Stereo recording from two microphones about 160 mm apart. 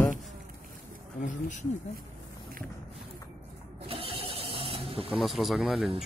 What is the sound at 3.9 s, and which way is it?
Vehicle, 35° right (ahead or behind).